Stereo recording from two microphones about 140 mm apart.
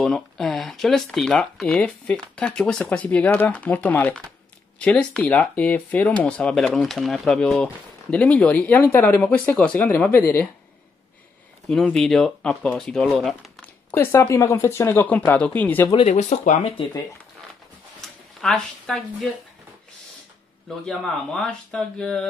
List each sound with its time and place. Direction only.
0.0 s speech: 5° left (ahead or behind)
11.6 s speech: 5° left (ahead or behind)
13.8 s speech: 20° left (ahead or behind)
15.9 s speech: 50° left (ahead or behind)
18.4 s speech: 5° left (ahead or behind)
20.8 s speech: 5° left (ahead or behind)